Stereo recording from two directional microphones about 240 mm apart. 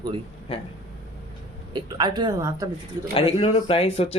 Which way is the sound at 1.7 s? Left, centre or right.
Centre.